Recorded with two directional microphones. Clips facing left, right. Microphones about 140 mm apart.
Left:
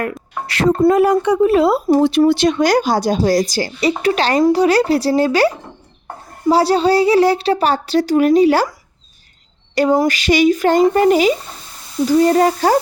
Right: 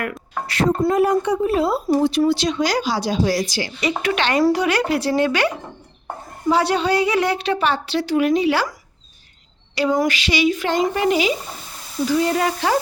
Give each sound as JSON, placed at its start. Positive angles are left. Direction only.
{"t": 0.4, "sound": "speech", "side_deg": 85}
{"t": 1.9, "sound": "a woman's voice", "side_deg": 60}
{"t": 9.9, "sound": "a woman's voice", "side_deg": 35}